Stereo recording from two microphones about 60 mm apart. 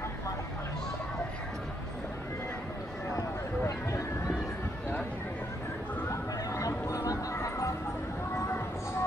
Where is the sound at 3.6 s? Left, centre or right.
Left.